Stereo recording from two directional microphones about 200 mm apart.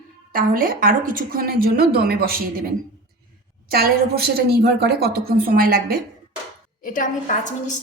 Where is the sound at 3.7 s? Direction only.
50° right (ahead or behind).